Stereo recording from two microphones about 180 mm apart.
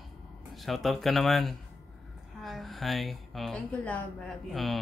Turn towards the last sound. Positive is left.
turn(degrees=0)  # may be behind; listen again after turning